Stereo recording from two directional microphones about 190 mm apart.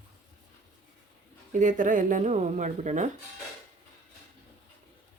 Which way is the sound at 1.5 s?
40° right (ahead or behind).